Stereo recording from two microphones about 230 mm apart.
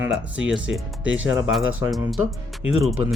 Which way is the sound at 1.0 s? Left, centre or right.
Right.